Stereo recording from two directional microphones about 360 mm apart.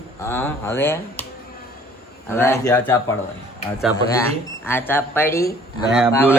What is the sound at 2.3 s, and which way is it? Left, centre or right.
Speech, centre.